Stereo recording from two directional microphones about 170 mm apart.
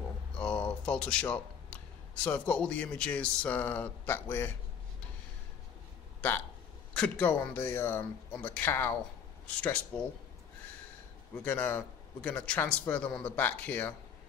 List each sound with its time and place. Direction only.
0.4 s a sound: 5° left (ahead or behind)
2.2 s a man's voice: 10° left (ahead or behind)
7.0 s a man's voice: 10° left (ahead or behind)
11.3 s a man's voice: 10° left (ahead or behind)